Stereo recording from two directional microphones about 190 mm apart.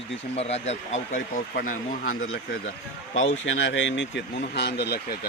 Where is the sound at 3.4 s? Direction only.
80° left; by 5.1 s 60° left (ahead or behind).